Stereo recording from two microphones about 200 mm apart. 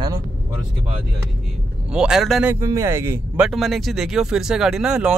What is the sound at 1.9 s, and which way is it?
Speech, 5° right (ahead or behind).